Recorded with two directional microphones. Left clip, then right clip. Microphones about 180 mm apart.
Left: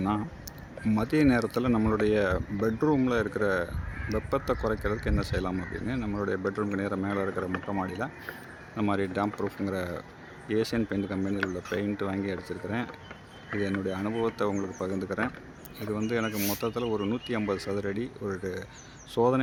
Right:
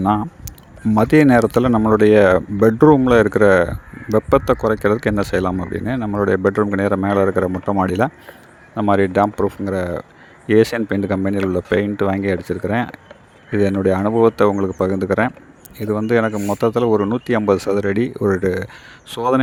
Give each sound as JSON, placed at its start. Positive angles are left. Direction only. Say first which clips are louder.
{"t": 0.0, "sound": "speech", "louder": "right 13 dB", "side_deg": -40}
{"t": 0.9, "sound": "speech", "louder": "right 13 dB", "side_deg": -55}
{"t": 8.7, "sound": "speech", "louder": "right 14 dB", "side_deg": -45}
{"t": 16.3, "sound": "speech", "louder": "right 10 dB", "side_deg": -15}
{"t": 16.6, "sound": "speech", "louder": "right 18 dB", "side_deg": -50}